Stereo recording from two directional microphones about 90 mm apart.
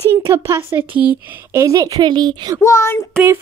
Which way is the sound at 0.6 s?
25° right (ahead or behind).